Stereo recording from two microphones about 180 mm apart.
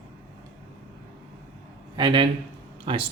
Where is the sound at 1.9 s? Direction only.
25° right (ahead or behind).